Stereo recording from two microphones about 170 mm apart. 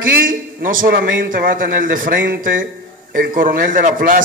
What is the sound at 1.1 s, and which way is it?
A man's voice, 75° right (ahead or behind).